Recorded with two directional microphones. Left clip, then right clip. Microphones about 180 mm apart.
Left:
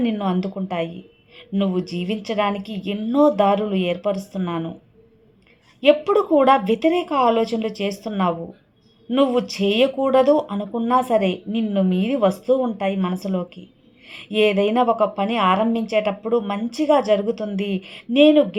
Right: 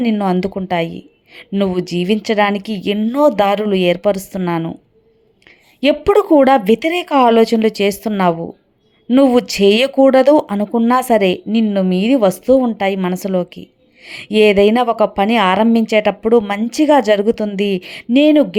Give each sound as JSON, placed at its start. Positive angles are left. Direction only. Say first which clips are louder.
{"t": 0.0, "sound": "speech", "louder": "right 7 dB", "side_deg": -30}
{"t": 5.5, "sound": "a sound", "louder": "right 1 dB", "side_deg": -30}
{"t": 6.1, "sound": "speech", "louder": "right 5 dB", "side_deg": -35}